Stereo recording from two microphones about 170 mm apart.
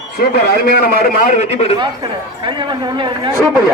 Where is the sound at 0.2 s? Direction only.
70° left (ahead or behind); by 1.7 s 40° left (ahead or behind).